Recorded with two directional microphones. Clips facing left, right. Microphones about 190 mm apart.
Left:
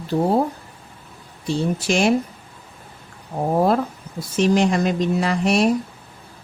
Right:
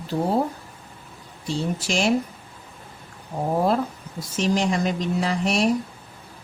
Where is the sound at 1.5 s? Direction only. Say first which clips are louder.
Left 5 dB; 60° left (ahead or behind).